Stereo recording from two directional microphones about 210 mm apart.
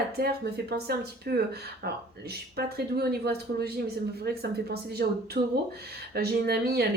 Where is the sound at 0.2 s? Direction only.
50° right (ahead or behind).